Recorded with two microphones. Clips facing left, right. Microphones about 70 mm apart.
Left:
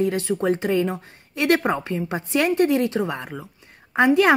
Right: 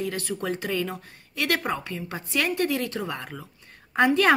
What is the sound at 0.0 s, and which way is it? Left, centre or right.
A woman's voice, left.